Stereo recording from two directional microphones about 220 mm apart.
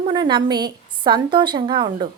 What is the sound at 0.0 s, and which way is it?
Speech, 20° right (ahead or behind).